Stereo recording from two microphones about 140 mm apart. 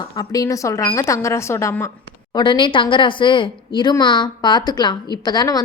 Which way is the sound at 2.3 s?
35° left (ahead or behind).